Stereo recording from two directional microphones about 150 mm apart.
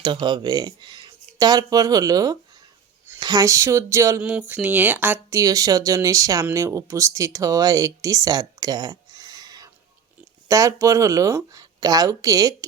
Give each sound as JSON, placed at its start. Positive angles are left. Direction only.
{"t": 0.0, "sound": "speech", "side_deg": -30}